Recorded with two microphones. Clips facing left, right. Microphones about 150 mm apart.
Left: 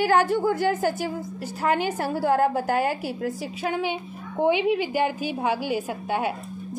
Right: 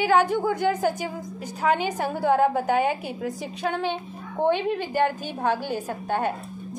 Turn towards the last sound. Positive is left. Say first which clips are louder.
# even
turn(degrees=10)  # may be behind; listen again after turning